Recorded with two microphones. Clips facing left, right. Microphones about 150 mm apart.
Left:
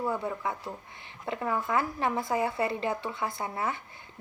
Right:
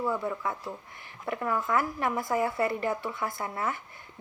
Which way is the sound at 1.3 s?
25° left (ahead or behind).